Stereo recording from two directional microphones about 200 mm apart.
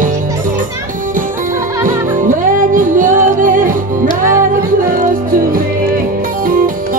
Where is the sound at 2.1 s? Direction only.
40° right (ahead or behind).